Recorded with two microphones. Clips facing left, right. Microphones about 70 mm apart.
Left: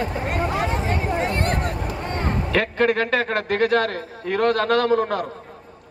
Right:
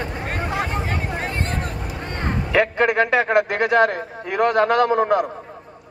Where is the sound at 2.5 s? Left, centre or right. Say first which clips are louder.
Right 3 dB; centre.